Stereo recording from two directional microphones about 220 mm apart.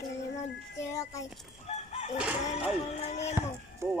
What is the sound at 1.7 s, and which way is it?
Chicken, 30° left (ahead or behind).